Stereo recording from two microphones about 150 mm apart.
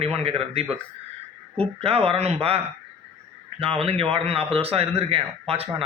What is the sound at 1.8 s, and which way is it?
A man's voice, 40° right (ahead or behind).